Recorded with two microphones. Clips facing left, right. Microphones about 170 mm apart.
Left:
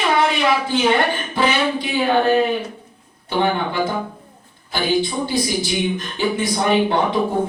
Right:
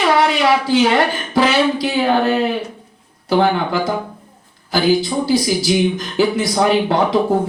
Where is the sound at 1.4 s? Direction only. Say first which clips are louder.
Right 5 dB; 90° right.